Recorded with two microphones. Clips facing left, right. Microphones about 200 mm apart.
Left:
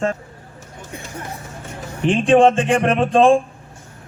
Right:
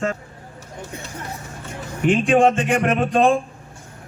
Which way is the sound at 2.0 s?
25° left (ahead or behind).